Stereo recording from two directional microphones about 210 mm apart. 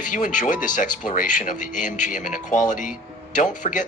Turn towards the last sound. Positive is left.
turn(degrees=35)  # may be behind; listen again after turning